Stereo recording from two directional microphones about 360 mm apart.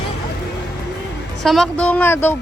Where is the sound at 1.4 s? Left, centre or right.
Centre.